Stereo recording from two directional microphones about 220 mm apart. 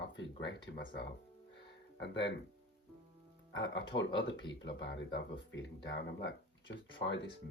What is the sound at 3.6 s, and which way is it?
Speech, 55° left (ahead or behind).